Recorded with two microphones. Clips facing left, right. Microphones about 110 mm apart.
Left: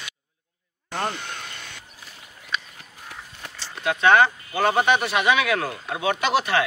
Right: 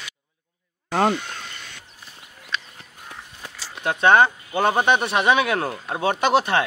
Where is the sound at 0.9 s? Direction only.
90° right.